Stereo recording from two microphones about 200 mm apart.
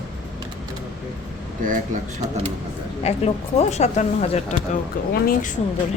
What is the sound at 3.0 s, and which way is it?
Speech, 30° left (ahead or behind).